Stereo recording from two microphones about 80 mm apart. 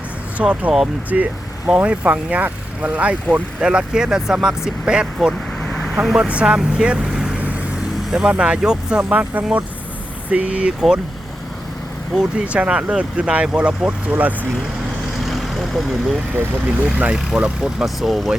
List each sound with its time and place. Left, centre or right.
0.3 s speech: centre
5.6 s vehicle: centre
5.9 s speech: centre
12.1 s speech: centre
15.4 s vehicle: centre
17.0 s speech: centre